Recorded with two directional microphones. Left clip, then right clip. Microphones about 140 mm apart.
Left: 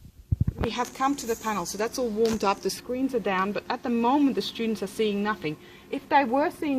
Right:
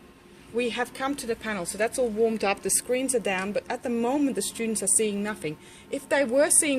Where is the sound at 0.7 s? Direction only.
90° left.